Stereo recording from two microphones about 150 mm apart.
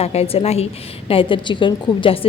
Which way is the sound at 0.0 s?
45° left (ahead or behind).